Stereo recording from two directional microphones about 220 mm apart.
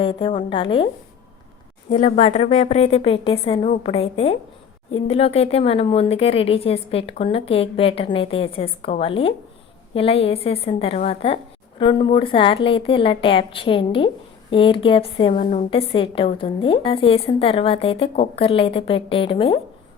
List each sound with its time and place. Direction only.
0.0 s speech: 25° left (ahead or behind)
1.9 s speech: 35° left (ahead or behind)